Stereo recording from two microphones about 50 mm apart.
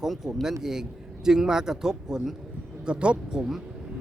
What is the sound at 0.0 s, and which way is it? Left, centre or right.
Speech, centre.